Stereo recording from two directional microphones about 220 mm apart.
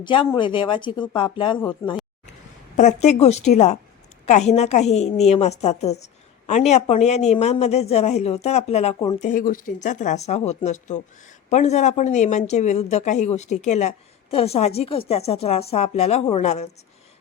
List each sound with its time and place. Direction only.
0.0 s speech: 20° left (ahead or behind)
1.8 s speech: 10° left (ahead or behind)
2.7 s speech: 30° left (ahead or behind)